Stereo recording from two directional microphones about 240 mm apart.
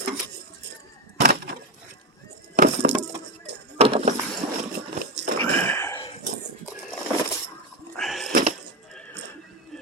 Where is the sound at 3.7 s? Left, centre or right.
Right.